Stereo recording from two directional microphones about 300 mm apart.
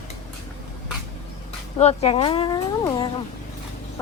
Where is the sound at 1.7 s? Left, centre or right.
Left.